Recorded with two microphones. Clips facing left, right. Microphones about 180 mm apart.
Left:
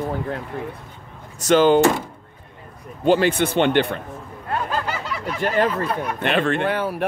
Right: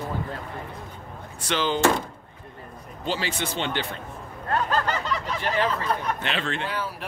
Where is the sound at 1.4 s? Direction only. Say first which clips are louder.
Left 11 dB; 45° left (ahead or behind).